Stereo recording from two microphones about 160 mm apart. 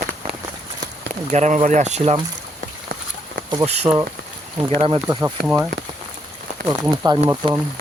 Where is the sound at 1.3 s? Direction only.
45° right (ahead or behind).